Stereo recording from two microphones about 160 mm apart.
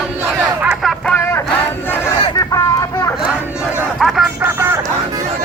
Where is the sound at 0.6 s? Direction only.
Centre (ahead or behind).